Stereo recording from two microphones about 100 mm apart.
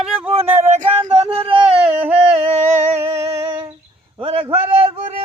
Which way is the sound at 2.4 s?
85° right.